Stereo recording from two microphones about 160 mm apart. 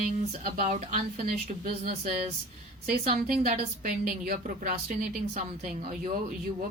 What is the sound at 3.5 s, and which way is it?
A woman's voice, 55° right (ahead or behind).